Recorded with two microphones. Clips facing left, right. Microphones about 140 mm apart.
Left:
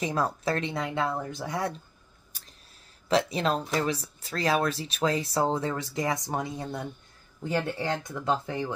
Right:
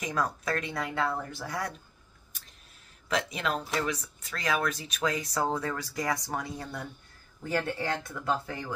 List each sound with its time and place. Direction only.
0.0 s speech: 30° left (ahead or behind)
3.1 s speech: 35° left (ahead or behind)